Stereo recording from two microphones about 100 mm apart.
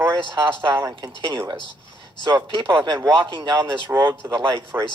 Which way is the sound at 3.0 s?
35° right (ahead or behind).